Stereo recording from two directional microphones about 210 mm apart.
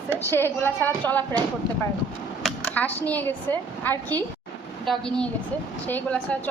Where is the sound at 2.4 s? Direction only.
5° left (ahead or behind).